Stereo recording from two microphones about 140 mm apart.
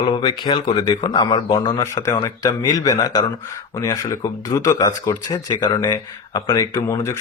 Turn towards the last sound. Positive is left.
turn(degrees=20)  # may be behind; listen again after turning